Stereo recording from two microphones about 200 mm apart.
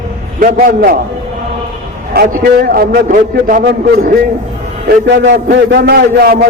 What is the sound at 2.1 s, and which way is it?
A man's voice, 50° right (ahead or behind).